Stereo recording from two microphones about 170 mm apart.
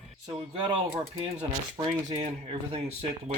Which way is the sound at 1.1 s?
35° right (ahead or behind).